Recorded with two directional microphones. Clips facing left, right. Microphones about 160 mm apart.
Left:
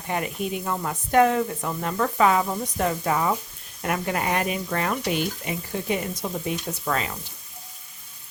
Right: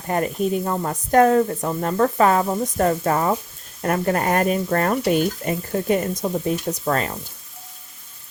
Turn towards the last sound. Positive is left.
turn(degrees=-40)  # may be behind; listen again after turning